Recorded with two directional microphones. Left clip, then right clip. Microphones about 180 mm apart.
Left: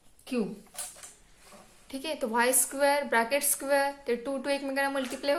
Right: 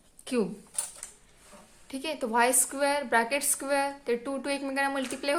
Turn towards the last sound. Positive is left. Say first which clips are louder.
# even
turn(degrees=-30)  # may be behind; listen again after turning